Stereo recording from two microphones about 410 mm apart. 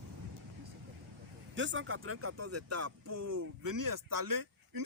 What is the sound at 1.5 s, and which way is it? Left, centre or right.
Speech, right.